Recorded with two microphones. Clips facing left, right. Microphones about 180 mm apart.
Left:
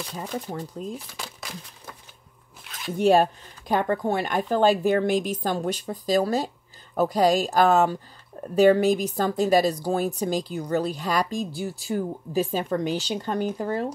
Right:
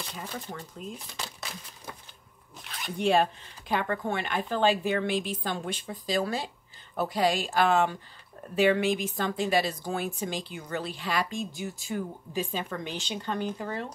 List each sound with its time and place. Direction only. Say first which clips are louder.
0.1 s speech: left 7 dB; 35° left (ahead or behind)
0.9 s crumpling: left 3 dB; 5° left (ahead or behind)
2.6 s zipper: right 1 dB; centre (ahead or behind)
3.0 s speech: left 6 dB; 40° left (ahead or behind)